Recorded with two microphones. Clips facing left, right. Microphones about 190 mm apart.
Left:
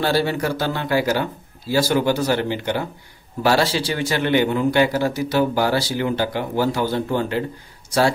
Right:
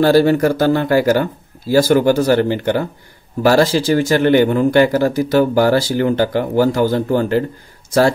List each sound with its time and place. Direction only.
0.0 s a man's voice: 45° right (ahead or behind)